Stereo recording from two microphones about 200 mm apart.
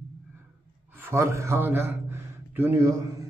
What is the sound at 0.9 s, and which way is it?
A man's voice, 10° right (ahead or behind).